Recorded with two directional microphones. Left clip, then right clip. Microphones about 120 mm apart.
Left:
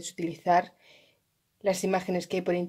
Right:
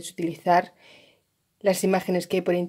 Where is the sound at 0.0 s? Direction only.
5° right (ahead or behind).